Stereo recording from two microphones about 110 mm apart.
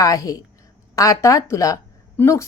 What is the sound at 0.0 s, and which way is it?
Speech, 30° left (ahead or behind).